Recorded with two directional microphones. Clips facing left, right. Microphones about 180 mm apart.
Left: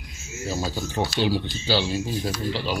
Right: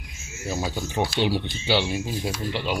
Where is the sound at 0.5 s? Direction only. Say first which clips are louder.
Even; 15° right (ahead or behind).